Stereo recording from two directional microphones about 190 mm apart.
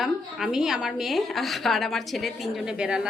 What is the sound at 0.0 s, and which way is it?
Speech, centre (ahead or behind).